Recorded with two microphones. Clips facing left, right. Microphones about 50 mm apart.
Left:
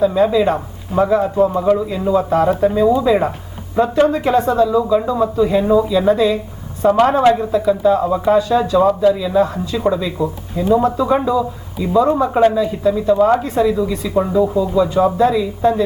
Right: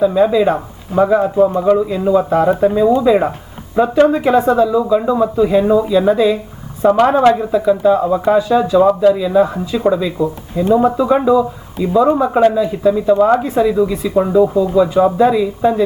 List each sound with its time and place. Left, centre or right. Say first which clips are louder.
0.0 s a woman's voice: right 2 dB; centre
1.5 s speech: right 2 dB; centre
1.8 s a woman's voice: right 3 dB; centre
3.9 s speech: right 4 dB; right
4.2 s a woman's voice: right 2 dB; centre